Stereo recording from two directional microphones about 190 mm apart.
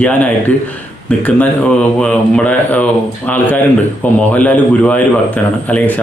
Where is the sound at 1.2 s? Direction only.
5° left (ahead or behind).